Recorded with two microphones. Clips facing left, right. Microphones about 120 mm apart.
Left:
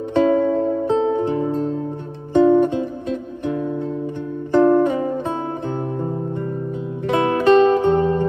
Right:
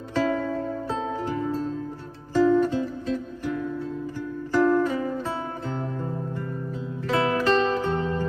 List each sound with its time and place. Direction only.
0.1 s music: 25° left (ahead or behind)
7.1 s music: 25° left (ahead or behind)